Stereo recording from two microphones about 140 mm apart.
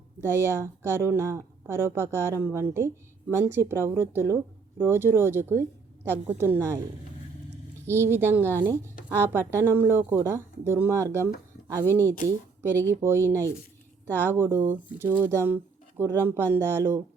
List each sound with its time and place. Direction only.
0.2 s a woman's voice: 20° right (ahead or behind)
7.9 s a woman's voice: 20° right (ahead or behind)